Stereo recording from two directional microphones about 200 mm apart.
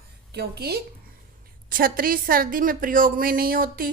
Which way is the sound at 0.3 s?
55° right (ahead or behind).